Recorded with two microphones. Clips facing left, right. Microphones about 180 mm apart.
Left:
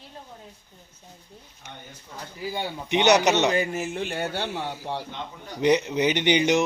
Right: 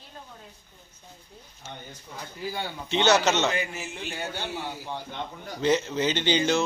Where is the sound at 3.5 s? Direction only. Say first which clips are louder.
Left 6 dB; 45° left (ahead or behind).